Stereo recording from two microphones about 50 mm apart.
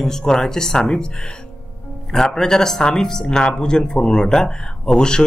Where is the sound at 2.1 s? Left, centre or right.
Centre.